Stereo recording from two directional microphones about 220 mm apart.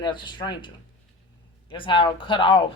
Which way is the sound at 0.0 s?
20° left (ahead or behind).